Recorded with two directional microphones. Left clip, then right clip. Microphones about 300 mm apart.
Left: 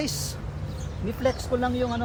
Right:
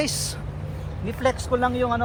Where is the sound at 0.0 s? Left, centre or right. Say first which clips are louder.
Right 4 dB; centre.